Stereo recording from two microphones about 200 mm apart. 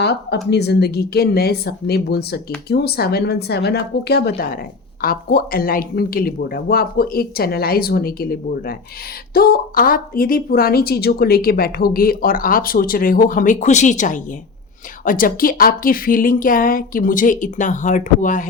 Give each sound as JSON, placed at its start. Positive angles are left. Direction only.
{"t": 0.0, "sound": "speech", "side_deg": 55}